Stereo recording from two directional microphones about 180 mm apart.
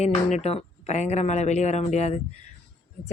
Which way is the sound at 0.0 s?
40° left (ahead or behind).